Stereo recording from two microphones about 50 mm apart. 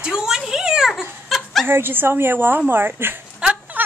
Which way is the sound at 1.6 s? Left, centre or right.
Right.